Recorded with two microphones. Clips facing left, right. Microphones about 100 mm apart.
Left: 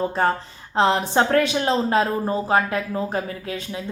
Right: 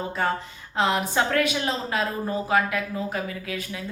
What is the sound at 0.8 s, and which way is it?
A woman's voice, 30° left (ahead or behind).